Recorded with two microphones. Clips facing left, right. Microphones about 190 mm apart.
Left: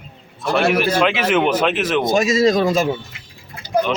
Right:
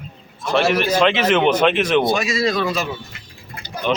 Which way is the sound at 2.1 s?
45° left (ahead or behind).